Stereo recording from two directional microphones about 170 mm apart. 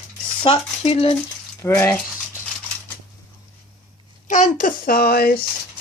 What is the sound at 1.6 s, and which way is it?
Speech, 15° left (ahead or behind).